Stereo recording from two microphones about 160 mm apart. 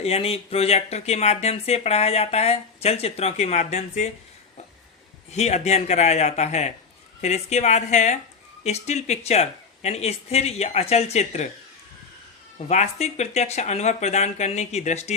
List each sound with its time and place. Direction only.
0.0 s speech: 40° left (ahead or behind)
5.3 s speech: 45° left (ahead or behind)
12.5 s speech: 45° left (ahead or behind)